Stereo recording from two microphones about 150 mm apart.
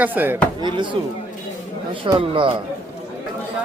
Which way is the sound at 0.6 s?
30° right (ahead or behind).